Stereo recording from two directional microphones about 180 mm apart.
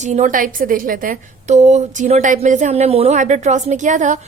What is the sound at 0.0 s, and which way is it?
A woman's voice, 40° right (ahead or behind).